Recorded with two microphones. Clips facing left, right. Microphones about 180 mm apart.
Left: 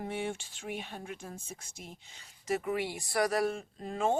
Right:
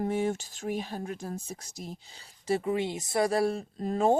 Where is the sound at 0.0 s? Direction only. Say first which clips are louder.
Right 7 dB; 40° right (ahead or behind).